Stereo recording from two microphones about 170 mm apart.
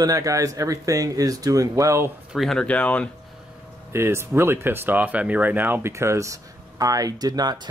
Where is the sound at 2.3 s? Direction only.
Centre (ahead or behind).